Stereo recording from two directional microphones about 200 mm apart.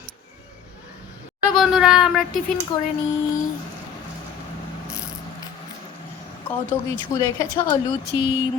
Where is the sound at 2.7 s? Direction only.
20° left (ahead or behind).